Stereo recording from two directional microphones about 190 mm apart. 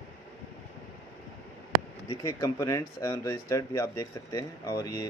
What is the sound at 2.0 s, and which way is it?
Speech, 15° left (ahead or behind).